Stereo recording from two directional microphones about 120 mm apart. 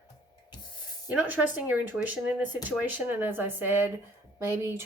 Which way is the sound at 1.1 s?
10° right (ahead or behind).